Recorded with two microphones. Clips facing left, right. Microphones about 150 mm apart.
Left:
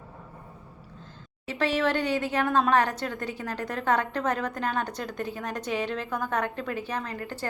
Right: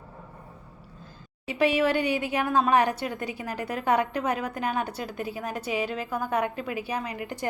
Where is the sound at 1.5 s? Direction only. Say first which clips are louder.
Right 3 dB; 10° right (ahead or behind).